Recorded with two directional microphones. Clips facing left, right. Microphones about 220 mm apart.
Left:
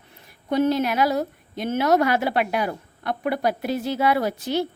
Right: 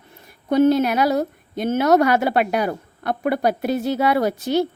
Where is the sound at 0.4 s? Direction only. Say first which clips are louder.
Right 5 dB; 50° right (ahead or behind).